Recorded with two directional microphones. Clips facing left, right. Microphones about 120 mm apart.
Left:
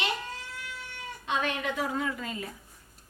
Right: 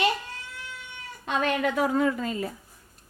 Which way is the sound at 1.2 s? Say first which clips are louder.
Right 5 dB; 50° right (ahead or behind).